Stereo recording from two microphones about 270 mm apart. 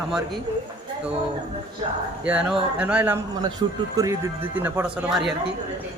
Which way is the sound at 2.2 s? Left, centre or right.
Centre.